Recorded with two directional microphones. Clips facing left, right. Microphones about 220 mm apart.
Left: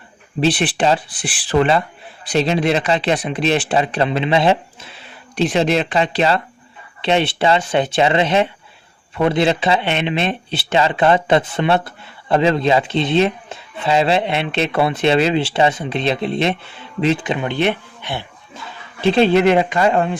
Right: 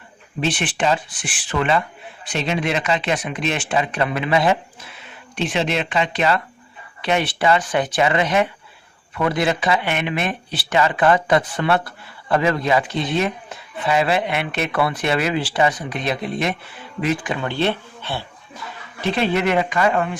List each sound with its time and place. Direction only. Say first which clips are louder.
0.3 s speech: left 5 dB; 35° left (ahead or behind); by 18.3 s 15° left (ahead or behind)
19.0 s speech: left 7 dB; 30° left (ahead or behind)